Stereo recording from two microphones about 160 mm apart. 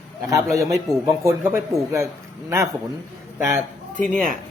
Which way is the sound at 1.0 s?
15° right (ahead or behind).